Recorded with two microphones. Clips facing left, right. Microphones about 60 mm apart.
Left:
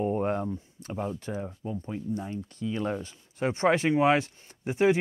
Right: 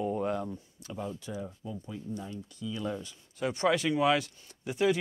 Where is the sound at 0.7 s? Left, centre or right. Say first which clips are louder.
Left 3 dB; left.